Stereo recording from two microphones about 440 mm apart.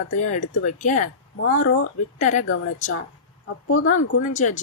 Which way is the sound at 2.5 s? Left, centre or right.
Left.